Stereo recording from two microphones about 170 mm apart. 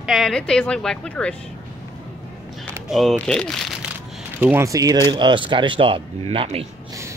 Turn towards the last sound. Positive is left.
turn(degrees=-35)  # may be behind; listen again after turning